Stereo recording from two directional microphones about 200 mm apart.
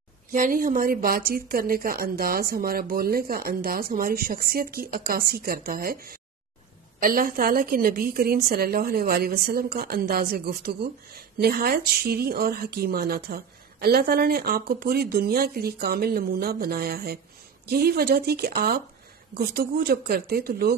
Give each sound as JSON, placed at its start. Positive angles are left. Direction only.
{"t": 0.3, "sound": "a woman's voice", "side_deg": -40}